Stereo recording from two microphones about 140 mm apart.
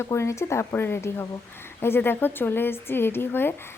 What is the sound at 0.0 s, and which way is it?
A woman's voice, 20° left (ahead or behind).